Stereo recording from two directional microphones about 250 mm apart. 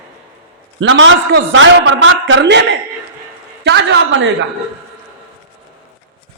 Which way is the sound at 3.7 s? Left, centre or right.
Right.